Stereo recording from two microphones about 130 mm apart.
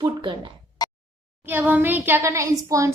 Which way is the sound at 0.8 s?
30° left (ahead or behind).